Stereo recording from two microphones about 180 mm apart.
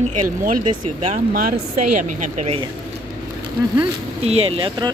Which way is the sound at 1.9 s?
45° right (ahead or behind).